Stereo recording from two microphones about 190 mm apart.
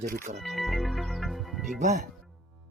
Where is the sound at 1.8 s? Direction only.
40° right (ahead or behind).